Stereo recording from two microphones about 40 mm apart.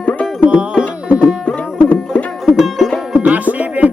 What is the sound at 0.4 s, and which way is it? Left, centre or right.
Music, right.